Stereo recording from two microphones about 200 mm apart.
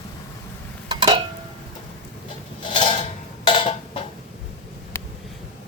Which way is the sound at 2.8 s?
30° left (ahead or behind).